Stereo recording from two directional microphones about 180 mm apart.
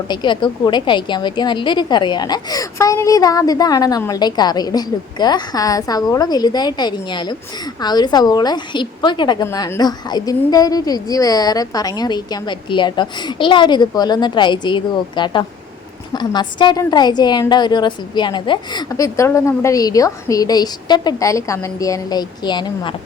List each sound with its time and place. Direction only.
0.1 s a woman's voice: 25° left (ahead or behind)